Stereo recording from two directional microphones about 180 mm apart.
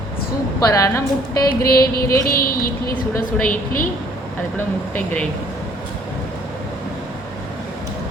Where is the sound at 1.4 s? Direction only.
55° left (ahead or behind).